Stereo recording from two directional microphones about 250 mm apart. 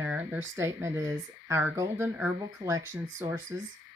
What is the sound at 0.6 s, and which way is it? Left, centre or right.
Speech, centre.